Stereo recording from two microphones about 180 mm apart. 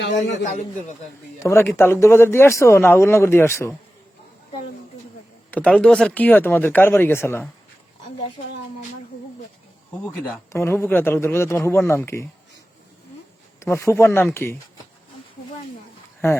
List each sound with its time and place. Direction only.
0.0 s a man's voice: 75° left (ahead or behind)
0.4 s a man's voice: 45° left (ahead or behind)
1.5 s speech: 15° left (ahead or behind)
5.5 s speech: 5° left (ahead or behind)
10.5 s speech: 15° left (ahead or behind)
13.7 s speech: 15° left (ahead or behind)
16.2 s speech: 15° left (ahead or behind)